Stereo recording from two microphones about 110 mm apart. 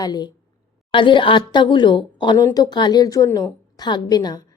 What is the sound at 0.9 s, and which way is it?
A woman's voice, 50° left (ahead or behind).